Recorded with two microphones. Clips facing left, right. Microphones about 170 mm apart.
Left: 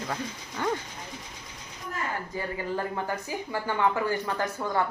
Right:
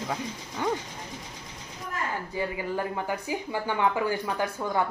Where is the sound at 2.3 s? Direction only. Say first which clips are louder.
Right 2 dB; 10° right (ahead or behind).